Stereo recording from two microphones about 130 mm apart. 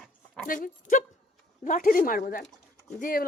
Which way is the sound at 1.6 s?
90° left.